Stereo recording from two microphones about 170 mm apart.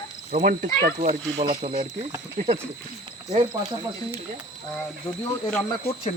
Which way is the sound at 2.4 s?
55° right (ahead or behind).